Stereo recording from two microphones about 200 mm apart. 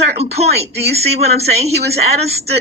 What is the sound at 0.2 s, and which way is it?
Speech, 30° right (ahead or behind).